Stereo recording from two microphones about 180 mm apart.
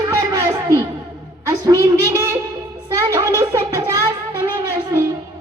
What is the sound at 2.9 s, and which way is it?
Child singing, 20° right (ahead or behind).